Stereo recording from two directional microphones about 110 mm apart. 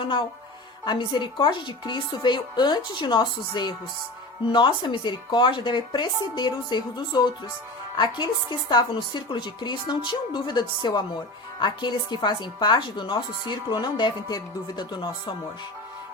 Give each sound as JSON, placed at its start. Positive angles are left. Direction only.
{"t": 0.0, "sound": "speech", "side_deg": 45}